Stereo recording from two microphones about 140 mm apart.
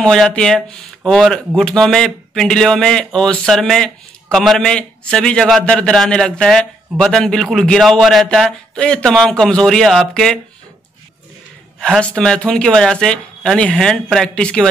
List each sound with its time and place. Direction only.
0.0 s speech: 5° left (ahead or behind)
11.8 s speech: 5° left (ahead or behind)